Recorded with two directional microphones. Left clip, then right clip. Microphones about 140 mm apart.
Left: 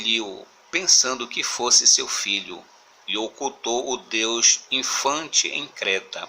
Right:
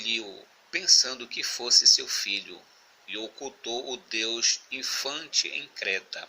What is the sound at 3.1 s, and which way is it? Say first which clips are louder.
Speech: left 10 dB; 15° left (ahead or behind).